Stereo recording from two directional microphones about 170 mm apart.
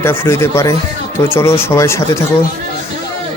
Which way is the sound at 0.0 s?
15° left (ahead or behind).